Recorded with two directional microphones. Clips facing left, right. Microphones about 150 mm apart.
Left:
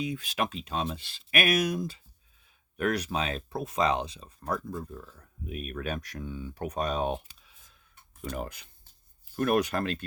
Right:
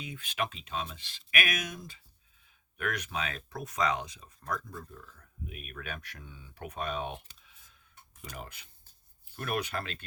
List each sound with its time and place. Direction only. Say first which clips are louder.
0.0 s speech: left 5 dB; 35° left (ahead or behind)
8.2 s speech: left 9 dB; 50° left (ahead or behind)